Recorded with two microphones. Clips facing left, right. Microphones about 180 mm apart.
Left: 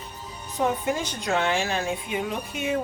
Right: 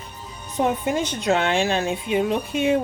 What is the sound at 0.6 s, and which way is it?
A woman's voice, 20° right (ahead or behind).